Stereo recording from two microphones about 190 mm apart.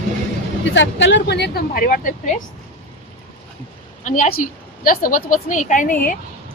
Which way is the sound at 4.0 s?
40° left (ahead or behind).